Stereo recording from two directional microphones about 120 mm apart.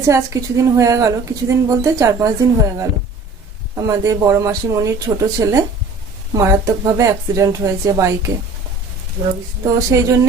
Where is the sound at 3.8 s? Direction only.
25° right (ahead or behind).